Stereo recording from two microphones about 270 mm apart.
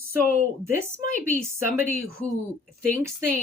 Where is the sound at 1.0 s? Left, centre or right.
Left.